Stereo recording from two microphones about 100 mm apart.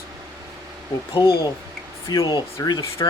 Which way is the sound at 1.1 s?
65° left (ahead or behind).